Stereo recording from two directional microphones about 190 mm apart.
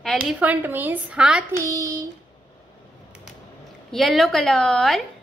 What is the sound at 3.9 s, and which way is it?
A woman's voice, centre (ahead or behind).